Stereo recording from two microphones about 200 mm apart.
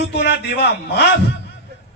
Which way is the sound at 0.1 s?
60° left (ahead or behind).